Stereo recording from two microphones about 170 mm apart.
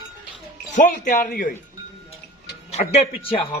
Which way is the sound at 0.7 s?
50° left (ahead or behind).